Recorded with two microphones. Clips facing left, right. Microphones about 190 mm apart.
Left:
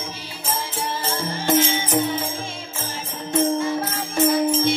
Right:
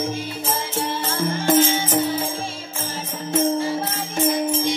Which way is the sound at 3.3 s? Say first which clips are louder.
Even; 30° right (ahead or behind).